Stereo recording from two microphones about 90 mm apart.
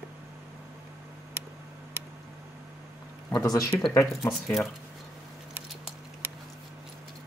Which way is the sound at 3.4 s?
40° left (ahead or behind).